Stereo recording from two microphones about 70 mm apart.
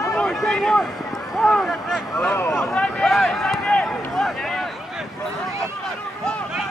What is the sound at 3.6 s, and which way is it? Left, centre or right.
Run, centre.